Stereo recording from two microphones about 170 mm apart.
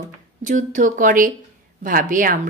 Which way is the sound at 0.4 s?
50° right (ahead or behind).